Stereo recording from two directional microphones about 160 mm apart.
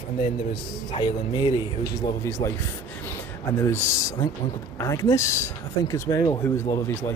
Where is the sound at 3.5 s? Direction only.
15° left (ahead or behind).